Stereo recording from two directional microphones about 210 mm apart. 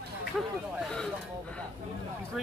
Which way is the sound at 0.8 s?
5° left (ahead or behind).